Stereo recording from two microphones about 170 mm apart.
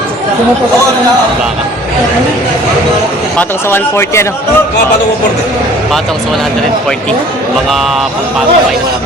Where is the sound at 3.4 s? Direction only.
15° left (ahead or behind).